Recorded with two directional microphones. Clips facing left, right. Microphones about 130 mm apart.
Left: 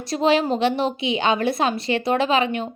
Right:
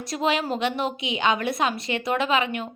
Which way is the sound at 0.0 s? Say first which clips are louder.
Left 6 dB; 30° left (ahead or behind).